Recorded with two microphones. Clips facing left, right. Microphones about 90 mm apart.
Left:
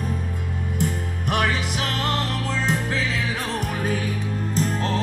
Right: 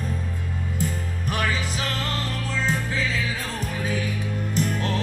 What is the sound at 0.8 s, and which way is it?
Music, 75° left (ahead or behind).